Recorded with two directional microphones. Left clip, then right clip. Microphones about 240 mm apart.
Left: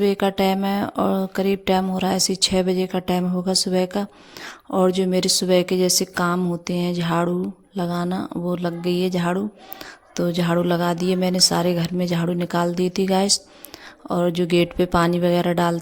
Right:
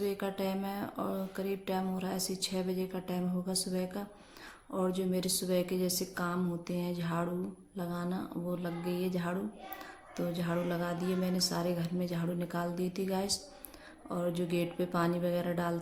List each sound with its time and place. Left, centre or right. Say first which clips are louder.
0.0 s speech: left 15 dB; left